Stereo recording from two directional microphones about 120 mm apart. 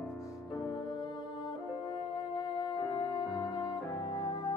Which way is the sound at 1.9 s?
40° left (ahead or behind).